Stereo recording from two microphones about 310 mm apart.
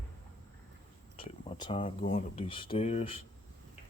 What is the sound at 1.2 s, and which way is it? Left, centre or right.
Speech, centre.